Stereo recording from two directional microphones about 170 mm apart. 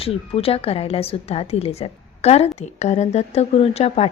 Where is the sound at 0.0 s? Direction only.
35° left (ahead or behind).